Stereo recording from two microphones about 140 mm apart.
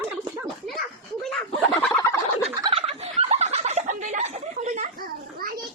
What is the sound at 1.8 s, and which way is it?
Fowl, 15° left (ahead or behind).